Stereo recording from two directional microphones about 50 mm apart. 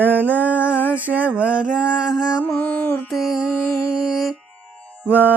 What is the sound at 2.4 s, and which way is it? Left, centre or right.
Music, left.